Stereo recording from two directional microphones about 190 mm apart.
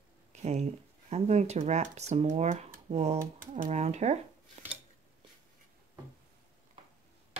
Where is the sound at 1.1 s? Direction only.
35° right (ahead or behind).